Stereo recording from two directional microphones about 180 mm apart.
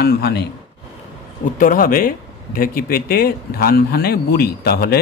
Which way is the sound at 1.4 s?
50° left (ahead or behind).